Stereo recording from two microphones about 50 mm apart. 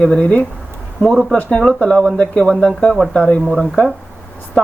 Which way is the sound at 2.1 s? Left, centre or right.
Left.